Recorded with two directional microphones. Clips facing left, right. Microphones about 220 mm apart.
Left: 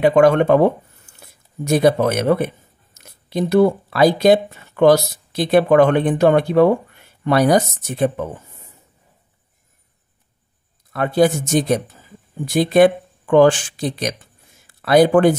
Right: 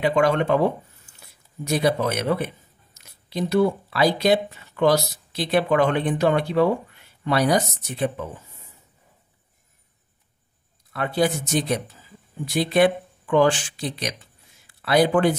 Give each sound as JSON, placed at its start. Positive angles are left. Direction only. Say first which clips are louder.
{"t": 0.0, "sound": "speech", "louder": "left 7 dB", "side_deg": 50}
{"t": 10.9, "sound": "speech", "louder": "left 7 dB", "side_deg": 45}